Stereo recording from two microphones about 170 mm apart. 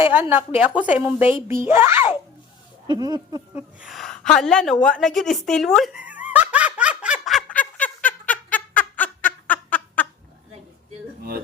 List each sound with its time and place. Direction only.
0.0 s speech: 10° right (ahead or behind)
2.8 s speech: 25° right (ahead or behind)
3.5 s a sound: 5° right (ahead or behind)